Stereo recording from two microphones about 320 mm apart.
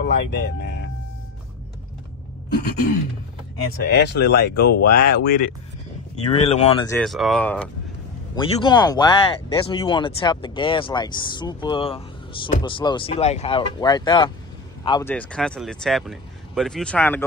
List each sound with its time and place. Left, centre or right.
0.0 s speech: left
3.8 s speech: left
6.2 s speech: centre
7.0 s speech: centre